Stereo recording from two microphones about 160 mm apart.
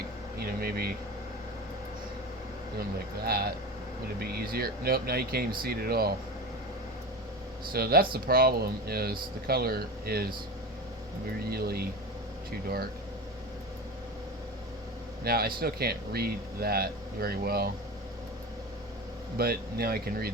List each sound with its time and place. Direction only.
0.3 s vehicle: 70° right (ahead or behind)
3.2 s speech: 75° right (ahead or behind)
7.7 s speech: 70° right (ahead or behind)
11.5 s speech: 75° right (ahead or behind)
15.2 s speech: 70° right (ahead or behind)
19.4 s speech: 70° right (ahead or behind)